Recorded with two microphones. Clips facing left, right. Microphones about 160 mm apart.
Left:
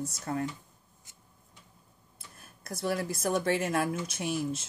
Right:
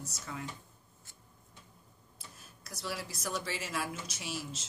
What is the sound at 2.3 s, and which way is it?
Speech, 55° left (ahead or behind).